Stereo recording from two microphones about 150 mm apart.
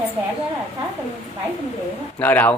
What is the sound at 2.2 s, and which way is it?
Speech, 10° left (ahead or behind).